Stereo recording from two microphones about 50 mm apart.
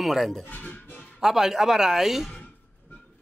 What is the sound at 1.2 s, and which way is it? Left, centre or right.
Speech, centre.